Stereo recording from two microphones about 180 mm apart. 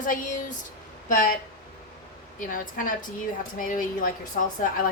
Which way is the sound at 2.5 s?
50° left (ahead or behind).